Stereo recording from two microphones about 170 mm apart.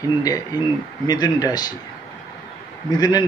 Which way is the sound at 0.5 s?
25° left (ahead or behind).